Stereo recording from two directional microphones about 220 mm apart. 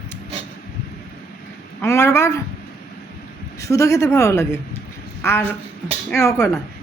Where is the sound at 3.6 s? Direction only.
15° left (ahead or behind).